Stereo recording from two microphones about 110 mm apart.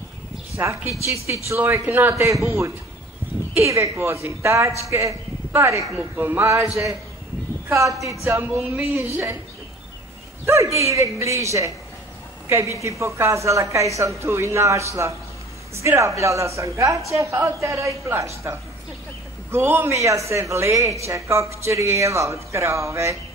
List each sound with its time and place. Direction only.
0.6 s speech: 25° right (ahead or behind)
7.7 s speech: 30° right (ahead or behind)
10.4 s a woman's voice: 25° right (ahead or behind)